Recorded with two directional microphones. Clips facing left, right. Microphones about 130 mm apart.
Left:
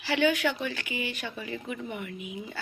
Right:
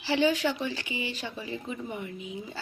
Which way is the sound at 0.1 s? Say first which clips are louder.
Even; 30° right (ahead or behind).